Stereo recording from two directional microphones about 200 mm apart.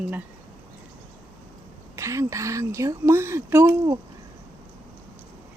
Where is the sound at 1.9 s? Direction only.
15° right (ahead or behind).